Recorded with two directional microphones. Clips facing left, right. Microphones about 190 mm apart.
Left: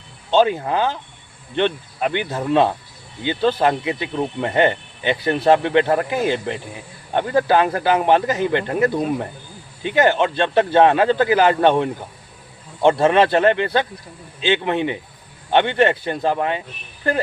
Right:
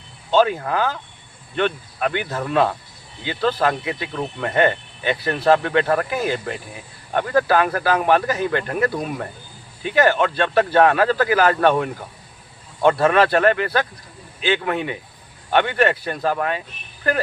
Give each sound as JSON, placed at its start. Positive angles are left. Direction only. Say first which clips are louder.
{"t": 0.3, "sound": "speech", "louder": "left 1 dB", "side_deg": 25}